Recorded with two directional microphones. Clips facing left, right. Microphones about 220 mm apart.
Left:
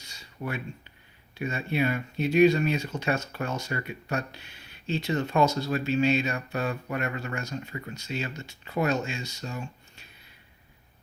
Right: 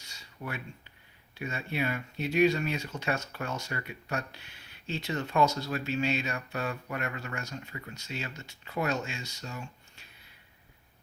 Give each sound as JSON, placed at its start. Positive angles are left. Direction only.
{"t": 0.4, "sound": "speech", "side_deg": 30}